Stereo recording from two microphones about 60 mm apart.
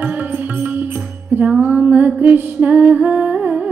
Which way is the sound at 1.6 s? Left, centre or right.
Right.